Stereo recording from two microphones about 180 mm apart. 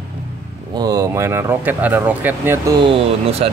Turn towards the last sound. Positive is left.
turn(degrees=-30)  # may be behind; listen again after turning